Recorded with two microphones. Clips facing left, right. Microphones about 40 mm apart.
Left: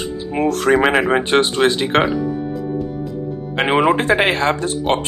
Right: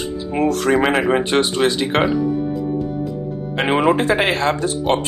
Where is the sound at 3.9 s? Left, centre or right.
Left.